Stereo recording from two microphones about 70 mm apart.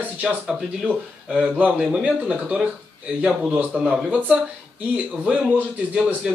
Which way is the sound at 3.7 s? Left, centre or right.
Centre.